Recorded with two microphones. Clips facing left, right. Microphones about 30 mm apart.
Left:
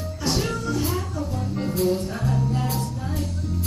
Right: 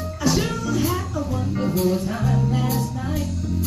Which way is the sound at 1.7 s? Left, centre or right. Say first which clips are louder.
Right 1 dB; right.